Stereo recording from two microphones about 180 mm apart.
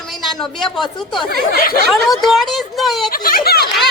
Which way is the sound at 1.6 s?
55° left (ahead or behind).